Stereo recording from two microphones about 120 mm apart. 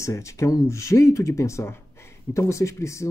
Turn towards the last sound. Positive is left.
turn(degrees=25)  # may be behind; listen again after turning